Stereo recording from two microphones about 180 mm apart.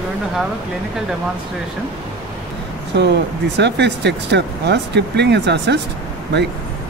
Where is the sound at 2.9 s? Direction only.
70° right (ahead or behind).